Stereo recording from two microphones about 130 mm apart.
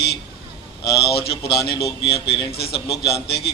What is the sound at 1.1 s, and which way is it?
Speech, 45° left (ahead or behind).